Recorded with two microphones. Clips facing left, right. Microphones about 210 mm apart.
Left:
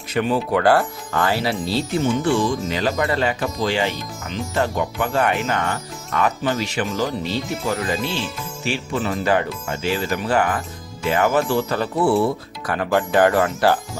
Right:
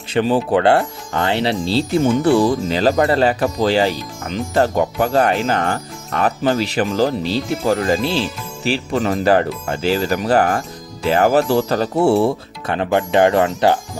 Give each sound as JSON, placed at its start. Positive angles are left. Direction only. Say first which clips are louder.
{"t": 0.1, "sound": "speech", "louder": "right 4 dB", "side_deg": -30}